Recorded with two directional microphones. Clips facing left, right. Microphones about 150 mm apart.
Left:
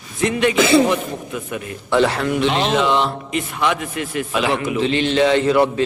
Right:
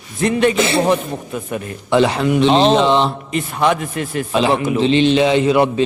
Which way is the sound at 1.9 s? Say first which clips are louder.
Right 3 dB; 20° right (ahead or behind).